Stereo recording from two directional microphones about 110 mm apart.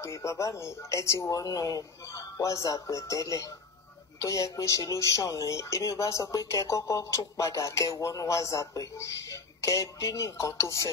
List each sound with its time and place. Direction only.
0.0 s speech: 25° left (ahead or behind)